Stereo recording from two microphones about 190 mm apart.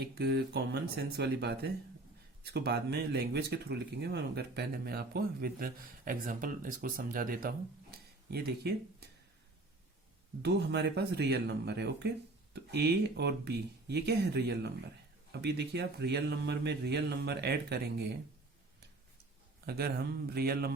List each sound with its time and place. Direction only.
0.0 s speech: 60° right (ahead or behind)
10.4 s speech: 60° right (ahead or behind)
19.6 s speech: 55° right (ahead or behind)